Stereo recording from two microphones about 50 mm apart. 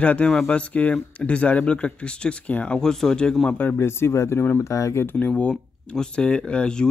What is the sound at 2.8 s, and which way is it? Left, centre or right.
Speech, centre.